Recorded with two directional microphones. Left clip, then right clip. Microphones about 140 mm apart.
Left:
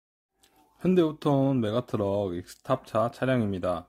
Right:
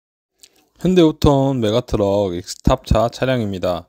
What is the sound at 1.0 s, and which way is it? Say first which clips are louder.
Speech: right 11 dB; 45° right (ahead or behind).